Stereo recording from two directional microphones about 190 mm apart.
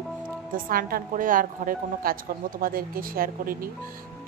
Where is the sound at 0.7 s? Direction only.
50° right (ahead or behind).